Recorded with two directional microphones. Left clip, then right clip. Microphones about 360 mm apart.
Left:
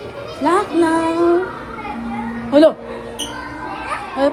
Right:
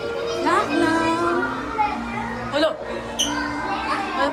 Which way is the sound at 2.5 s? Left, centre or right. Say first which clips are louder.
Left 10 dB; centre.